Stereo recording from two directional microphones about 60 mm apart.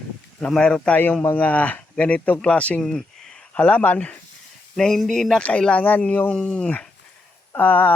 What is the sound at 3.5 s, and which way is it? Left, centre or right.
Speech, left.